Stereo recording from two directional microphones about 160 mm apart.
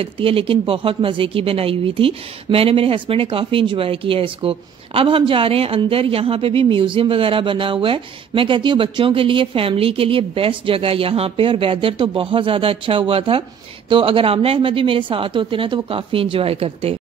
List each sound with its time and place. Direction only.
0.0 s speech: 35° right (ahead or behind)